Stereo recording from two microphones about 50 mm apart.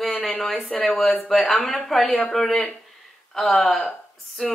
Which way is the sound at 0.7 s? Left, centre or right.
Centre.